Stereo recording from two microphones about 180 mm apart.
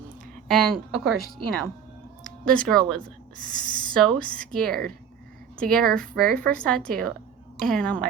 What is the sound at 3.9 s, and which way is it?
A woman's voice, 5° left (ahead or behind).